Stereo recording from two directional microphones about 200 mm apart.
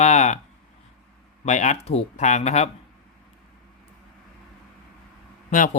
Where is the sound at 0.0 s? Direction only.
35° left (ahead or behind).